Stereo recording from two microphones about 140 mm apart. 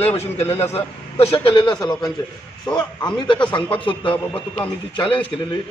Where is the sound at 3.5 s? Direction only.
35° left (ahead or behind).